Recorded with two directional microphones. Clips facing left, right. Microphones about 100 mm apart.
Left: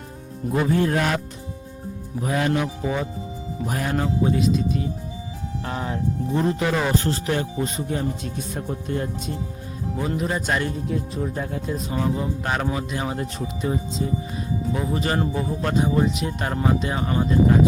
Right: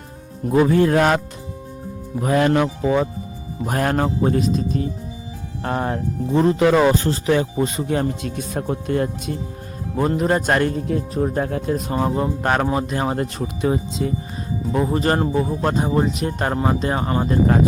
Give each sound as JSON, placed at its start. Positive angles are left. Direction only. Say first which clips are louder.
{"t": 0.5, "sound": "speech", "louder": "right 6 dB", "side_deg": -90}
{"t": 2.2, "sound": "speech", "louder": "right 6 dB", "side_deg": -80}
{"t": 6.3, "sound": "speech", "louder": "right 8 dB", "side_deg": -90}
{"t": 10.0, "sound": "speech", "louder": "right 7 dB", "side_deg": -50}
{"t": 11.9, "sound": "speech", "louder": "right 1 dB", "side_deg": -40}
{"t": 13.1, "sound": "speech", "louder": "right 4 dB", "side_deg": -80}
{"t": 14.7, "sound": "speech", "louder": "right 7 dB", "side_deg": -40}